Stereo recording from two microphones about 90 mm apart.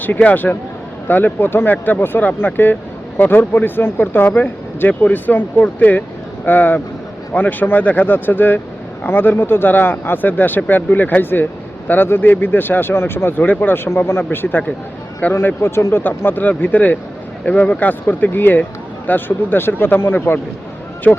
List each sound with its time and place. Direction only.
0.0 s speech: 15° left (ahead or behind)
21.1 s speech: 10° left (ahead or behind)